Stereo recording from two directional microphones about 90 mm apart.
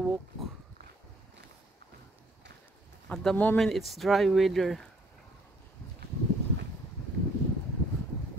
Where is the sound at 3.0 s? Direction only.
5° left (ahead or behind).